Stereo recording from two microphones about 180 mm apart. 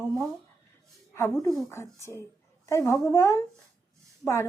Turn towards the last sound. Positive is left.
turn(degrees=15)  # may be behind; listen again after turning